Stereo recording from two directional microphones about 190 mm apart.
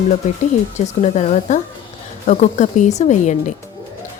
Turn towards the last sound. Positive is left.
turn(degrees=40)  # may be behind; listen again after turning